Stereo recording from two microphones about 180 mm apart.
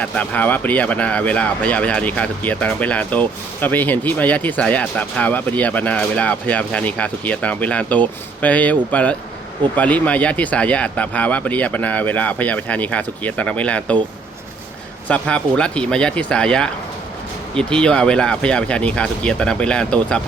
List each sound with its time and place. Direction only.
0.0 s speech: 10° left (ahead or behind)
15.0 s speech: 5° left (ahead or behind)